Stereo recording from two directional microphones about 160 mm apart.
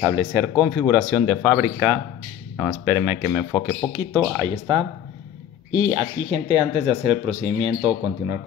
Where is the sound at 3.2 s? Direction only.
5° right (ahead or behind).